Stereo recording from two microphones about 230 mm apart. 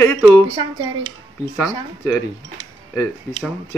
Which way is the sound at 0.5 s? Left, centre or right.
Centre.